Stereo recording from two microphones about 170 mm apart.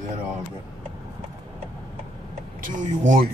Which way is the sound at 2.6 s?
50° right (ahead or behind).